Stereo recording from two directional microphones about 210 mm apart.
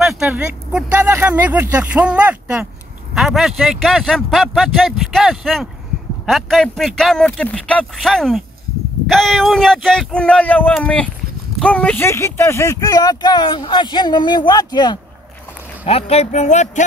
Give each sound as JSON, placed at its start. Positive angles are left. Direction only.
{"t": 0.0, "sound": "speech", "side_deg": 0}